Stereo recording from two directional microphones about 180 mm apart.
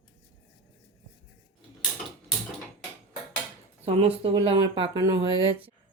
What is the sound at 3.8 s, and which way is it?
Speech, 35° right (ahead or behind).